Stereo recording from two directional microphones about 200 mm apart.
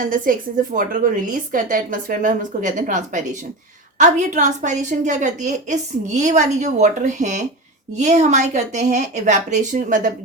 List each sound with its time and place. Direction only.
0.0 s a woman's voice: 45° right (ahead or behind)